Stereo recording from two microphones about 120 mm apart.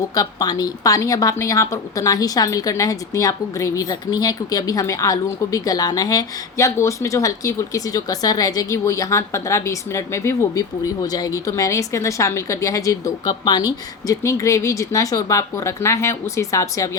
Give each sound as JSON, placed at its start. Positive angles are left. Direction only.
{"t": 0.1, "sound": "speech", "side_deg": 30}